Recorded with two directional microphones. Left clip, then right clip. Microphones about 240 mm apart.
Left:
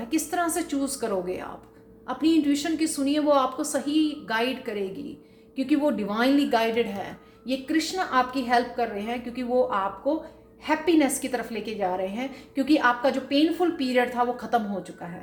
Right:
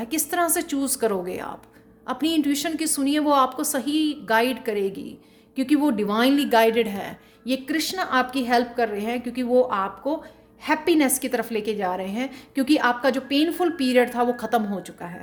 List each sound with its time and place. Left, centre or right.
0.0 s a woman's voice: right